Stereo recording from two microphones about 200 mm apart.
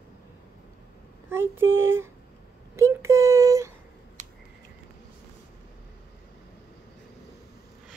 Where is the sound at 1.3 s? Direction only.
10° right (ahead or behind).